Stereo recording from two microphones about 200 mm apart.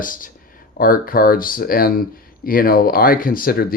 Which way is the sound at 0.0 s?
45° left (ahead or behind).